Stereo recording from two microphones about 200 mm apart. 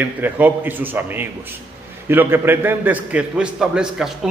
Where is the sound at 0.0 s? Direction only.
10° right (ahead or behind).